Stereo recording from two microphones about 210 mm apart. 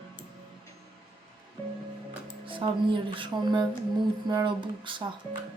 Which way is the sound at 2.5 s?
25° right (ahead or behind).